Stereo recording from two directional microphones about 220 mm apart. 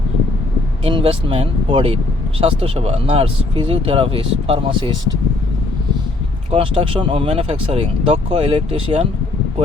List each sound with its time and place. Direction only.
0.9 s speech: 25° right (ahead or behind)
6.5 s speech: 25° right (ahead or behind)